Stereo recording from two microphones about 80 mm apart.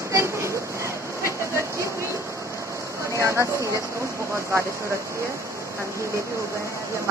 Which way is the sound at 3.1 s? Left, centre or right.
Right.